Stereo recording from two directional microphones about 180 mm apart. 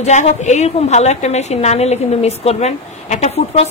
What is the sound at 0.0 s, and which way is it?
A woman's voice, 40° left (ahead or behind).